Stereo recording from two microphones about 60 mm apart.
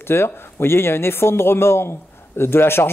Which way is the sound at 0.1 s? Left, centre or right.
Left.